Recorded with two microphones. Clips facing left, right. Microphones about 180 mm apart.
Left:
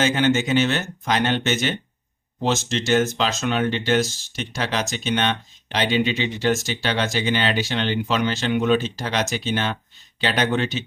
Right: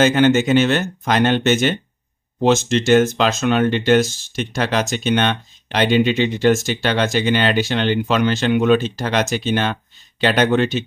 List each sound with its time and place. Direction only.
0.0 s speech: 55° right (ahead or behind)